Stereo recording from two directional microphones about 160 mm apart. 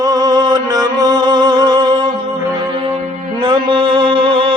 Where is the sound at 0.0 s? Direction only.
25° right (ahead or behind).